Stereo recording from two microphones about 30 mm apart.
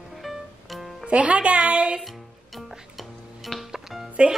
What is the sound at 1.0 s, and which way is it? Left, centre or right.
Speech, right.